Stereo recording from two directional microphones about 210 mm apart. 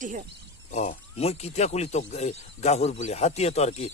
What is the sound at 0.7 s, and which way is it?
Speech, 35° left (ahead or behind).